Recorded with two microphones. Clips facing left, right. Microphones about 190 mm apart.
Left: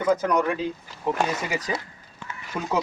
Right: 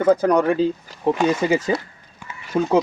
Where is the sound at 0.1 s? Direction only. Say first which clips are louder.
Right 5 dB; 30° right (ahead or behind).